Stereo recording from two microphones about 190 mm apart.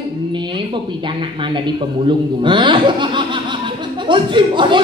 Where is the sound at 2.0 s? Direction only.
25° right (ahead or behind).